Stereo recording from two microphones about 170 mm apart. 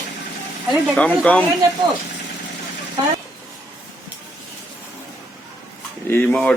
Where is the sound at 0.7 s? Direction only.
5° left (ahead or behind).